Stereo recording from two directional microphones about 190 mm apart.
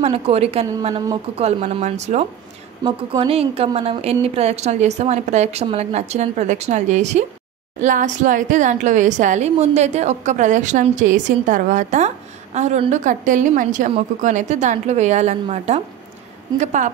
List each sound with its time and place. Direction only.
0.0 s a woman's voice: 30° right (ahead or behind)